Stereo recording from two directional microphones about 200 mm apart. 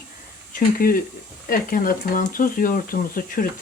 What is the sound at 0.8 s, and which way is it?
Speech, 45° left (ahead or behind).